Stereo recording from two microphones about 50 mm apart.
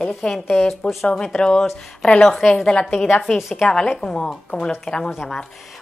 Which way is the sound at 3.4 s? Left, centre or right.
Centre.